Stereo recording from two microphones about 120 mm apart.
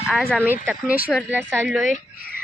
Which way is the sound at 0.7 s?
15° right (ahead or behind).